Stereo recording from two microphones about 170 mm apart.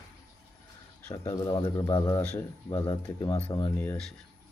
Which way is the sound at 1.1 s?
20° left (ahead or behind).